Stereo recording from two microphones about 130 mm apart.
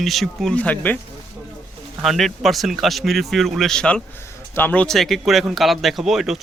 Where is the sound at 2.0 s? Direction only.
Centre (ahead or behind).